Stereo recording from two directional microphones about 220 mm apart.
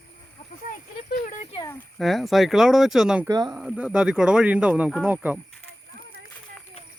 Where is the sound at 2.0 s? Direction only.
Centre (ahead or behind).